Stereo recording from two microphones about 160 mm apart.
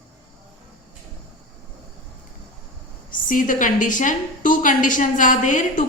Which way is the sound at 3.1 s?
55° left (ahead or behind).